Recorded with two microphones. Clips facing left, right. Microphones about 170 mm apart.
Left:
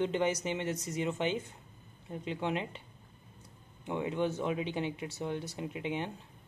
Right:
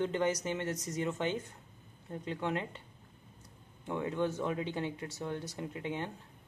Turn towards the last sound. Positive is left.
turn(degrees=20)  # may be behind; listen again after turning